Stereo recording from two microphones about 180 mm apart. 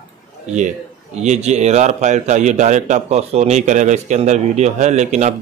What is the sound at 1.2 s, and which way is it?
A man's voice, 40° right (ahead or behind).